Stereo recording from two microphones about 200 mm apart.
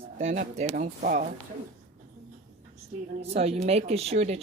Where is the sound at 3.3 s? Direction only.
30° right (ahead or behind).